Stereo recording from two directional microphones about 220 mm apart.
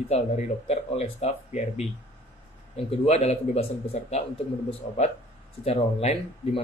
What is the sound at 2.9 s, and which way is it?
Speech, 30° left (ahead or behind).